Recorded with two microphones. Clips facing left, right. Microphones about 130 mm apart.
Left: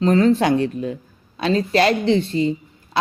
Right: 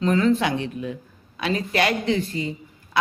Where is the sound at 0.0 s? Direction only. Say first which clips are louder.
Left 4 dB; 35° left (ahead or behind).